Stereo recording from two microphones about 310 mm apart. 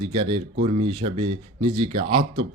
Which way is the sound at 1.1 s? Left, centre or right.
Right.